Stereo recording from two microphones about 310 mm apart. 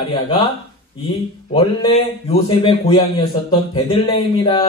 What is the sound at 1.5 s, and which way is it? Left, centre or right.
A man's voice, centre.